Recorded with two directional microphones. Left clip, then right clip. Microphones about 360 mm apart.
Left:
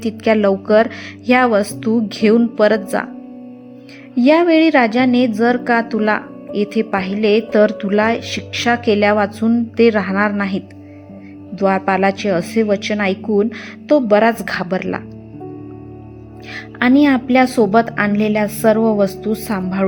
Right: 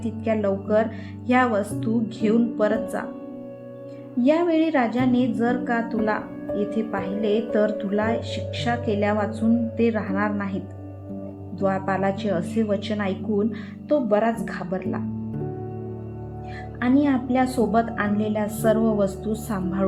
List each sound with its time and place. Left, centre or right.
0.0 s a woman's voice: centre
4.2 s a woman's voice: centre
11.6 s a woman's voice: centre
16.8 s a woman's voice: centre